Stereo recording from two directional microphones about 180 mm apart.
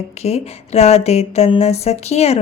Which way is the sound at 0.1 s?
35° left (ahead or behind).